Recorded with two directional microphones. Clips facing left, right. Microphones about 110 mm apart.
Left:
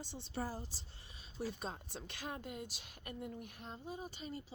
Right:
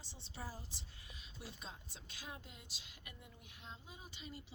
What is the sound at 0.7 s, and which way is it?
A woman's voice, 30° left (ahead or behind).